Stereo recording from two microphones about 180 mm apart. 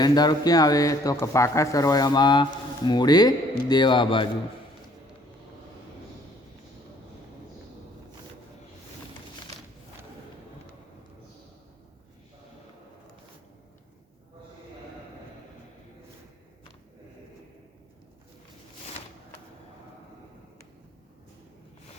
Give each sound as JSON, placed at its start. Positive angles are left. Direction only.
{"t": 0.0, "sound": "speech", "side_deg": 25}